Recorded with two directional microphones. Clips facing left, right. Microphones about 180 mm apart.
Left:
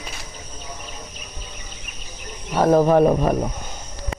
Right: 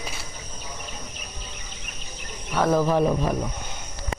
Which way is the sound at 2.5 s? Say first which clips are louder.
Left 5 dB; 35° left (ahead or behind).